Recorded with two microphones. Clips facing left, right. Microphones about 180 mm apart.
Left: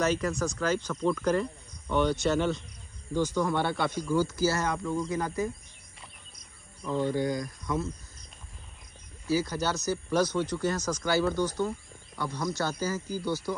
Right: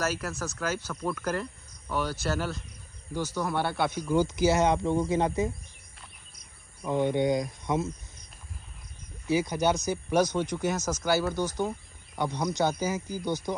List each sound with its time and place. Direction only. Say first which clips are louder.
0.0 s speech: left 4 dB; 5° right (ahead or behind)
4.0 s speech: right 2 dB; 20° right (ahead or behind)
6.8 s speech: right 2 dB; 15° right (ahead or behind)
9.3 s speech: right 3 dB; 15° right (ahead or behind)